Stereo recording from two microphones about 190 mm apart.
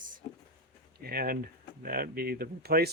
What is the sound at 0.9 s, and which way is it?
Speech, 55° right (ahead or behind).